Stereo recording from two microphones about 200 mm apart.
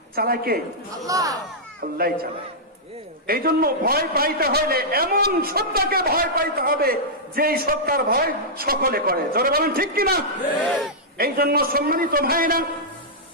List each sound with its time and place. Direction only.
0.1 s a man's voice: 50° right (ahead or behind)
1.0 s speech: 15° right (ahead or behind)
3.3 s a man's voice: 50° right (ahead or behind)